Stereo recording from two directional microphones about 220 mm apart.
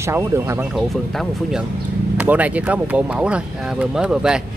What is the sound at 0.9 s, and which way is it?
Speech, centre (ahead or behind).